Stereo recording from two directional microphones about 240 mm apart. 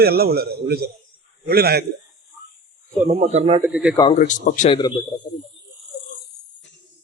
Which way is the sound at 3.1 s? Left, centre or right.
Right.